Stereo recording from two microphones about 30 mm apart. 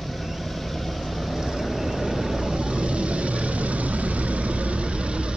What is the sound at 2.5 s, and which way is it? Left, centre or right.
Vehicle, right.